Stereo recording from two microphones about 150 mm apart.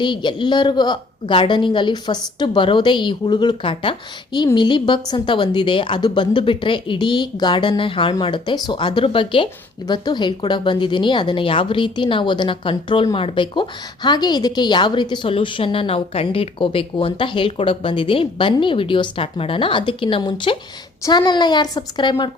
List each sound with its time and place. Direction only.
0.0 s a woman's voice: 30° left (ahead or behind)